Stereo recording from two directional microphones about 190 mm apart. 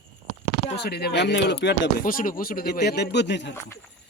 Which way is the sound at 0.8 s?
55° left (ahead or behind).